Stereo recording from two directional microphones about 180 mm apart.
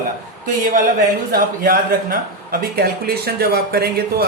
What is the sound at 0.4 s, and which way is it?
A man's voice, 45° right (ahead or behind).